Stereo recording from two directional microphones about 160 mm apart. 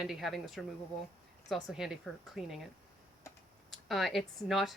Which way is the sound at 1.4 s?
Centre (ahead or behind).